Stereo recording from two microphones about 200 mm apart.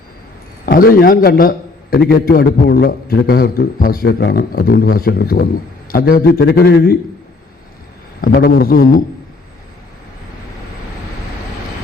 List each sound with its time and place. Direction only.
0.6 s a man's voice: 45° left (ahead or behind)
8.2 s a man's voice: 50° left (ahead or behind)